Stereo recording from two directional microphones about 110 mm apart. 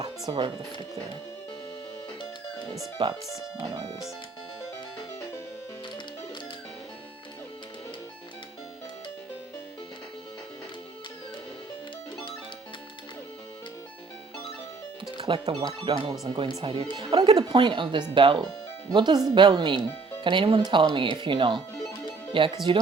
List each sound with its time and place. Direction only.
0.3 s speech: 55° right (ahead or behind)
3.0 s speech: 50° right (ahead or behind)
15.2 s speech: 60° right (ahead or behind)
17.4 s speech: 40° right (ahead or behind)
20.6 s speech: 40° right (ahead or behind)